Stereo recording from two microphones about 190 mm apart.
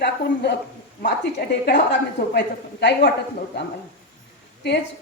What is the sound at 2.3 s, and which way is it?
Speech, 60° left (ahead or behind).